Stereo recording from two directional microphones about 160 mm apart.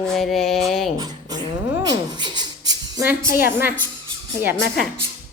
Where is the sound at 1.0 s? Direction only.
25° right (ahead or behind).